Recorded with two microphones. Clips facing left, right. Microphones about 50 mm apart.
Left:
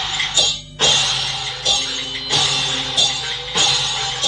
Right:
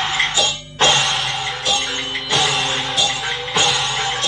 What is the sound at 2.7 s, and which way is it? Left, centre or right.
Music, right.